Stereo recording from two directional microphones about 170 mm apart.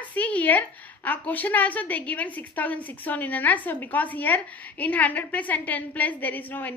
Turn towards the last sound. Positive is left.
turn(degrees=10)  # may be behind; listen again after turning